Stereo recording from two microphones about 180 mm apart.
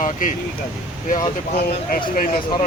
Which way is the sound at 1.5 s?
50° left (ahead or behind).